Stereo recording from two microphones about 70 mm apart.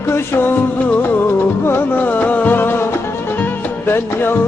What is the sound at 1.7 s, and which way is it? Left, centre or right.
Music, left.